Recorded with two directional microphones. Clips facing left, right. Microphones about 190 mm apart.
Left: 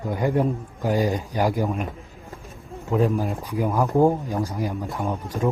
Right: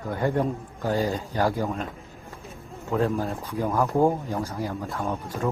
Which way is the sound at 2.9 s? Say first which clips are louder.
Left 3 dB; 15° left (ahead or behind).